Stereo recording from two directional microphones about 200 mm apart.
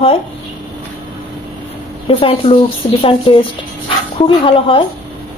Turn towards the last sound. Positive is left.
turn(degrees=25)  # may be behind; listen again after turning